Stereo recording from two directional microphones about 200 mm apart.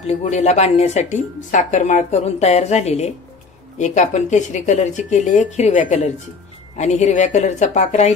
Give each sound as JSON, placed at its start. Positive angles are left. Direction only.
{"t": 0.0, "sound": "speech", "side_deg": 35}